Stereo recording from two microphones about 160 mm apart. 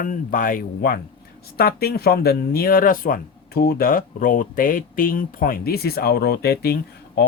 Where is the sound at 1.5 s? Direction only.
75° left (ahead or behind).